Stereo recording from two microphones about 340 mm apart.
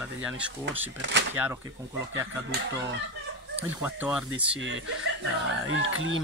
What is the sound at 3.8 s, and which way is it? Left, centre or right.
Speech, centre.